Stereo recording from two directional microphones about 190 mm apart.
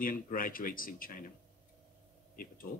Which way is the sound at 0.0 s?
45° left (ahead or behind).